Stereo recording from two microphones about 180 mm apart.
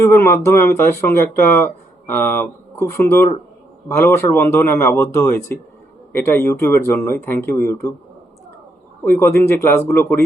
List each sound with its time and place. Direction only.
0.0 s speech: 15° left (ahead or behind)
9.0 s speech: 15° left (ahead or behind)